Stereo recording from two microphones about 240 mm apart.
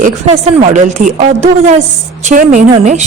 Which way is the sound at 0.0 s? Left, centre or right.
Right.